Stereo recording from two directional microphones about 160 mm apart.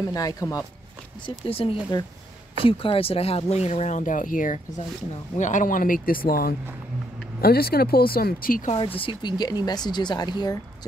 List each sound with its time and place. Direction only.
0.1 s speech: 20° left (ahead or behind)
1.2 s speech: 35° left (ahead or behind); by 8.7 s 60° left (ahead or behind)
9.0 s speech: 25° left (ahead or behind)